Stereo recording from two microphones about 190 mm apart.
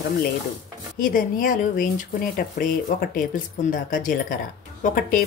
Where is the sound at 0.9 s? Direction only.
45° left (ahead or behind).